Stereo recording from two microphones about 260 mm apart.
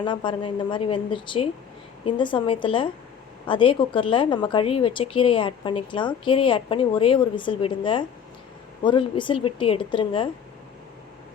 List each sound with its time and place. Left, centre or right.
0.0 s speech: centre